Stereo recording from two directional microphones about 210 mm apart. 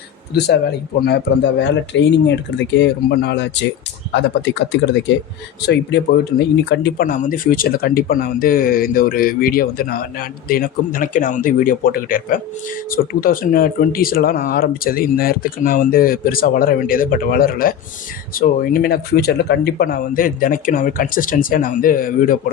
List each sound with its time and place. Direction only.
0.3 s speech: 50° left (ahead or behind)